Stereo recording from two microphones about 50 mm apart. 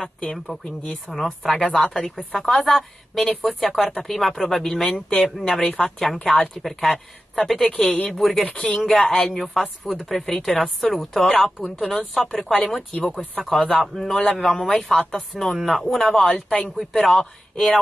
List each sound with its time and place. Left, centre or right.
0.5 s a woman's voice: centre
8.4 s speech: centre
8.6 s a woman's voice: centre